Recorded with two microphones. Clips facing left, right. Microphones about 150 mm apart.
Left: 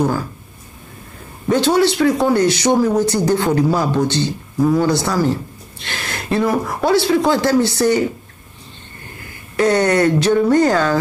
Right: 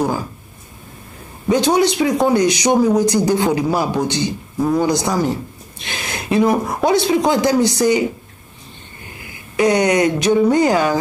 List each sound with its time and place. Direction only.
1.5 s speech: 15° right (ahead or behind)
9.6 s speech: 15° right (ahead or behind)